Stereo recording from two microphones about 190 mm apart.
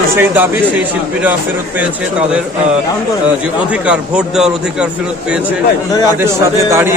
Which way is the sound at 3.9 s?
5° right (ahead or behind).